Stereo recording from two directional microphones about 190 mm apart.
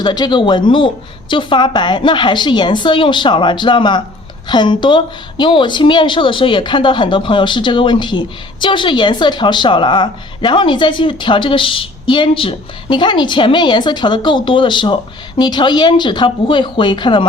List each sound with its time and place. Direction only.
0.0 s a woman's voice: 20° left (ahead or behind)